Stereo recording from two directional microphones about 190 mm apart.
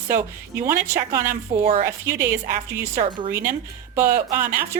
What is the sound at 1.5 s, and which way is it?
Speech, 30° right (ahead or behind).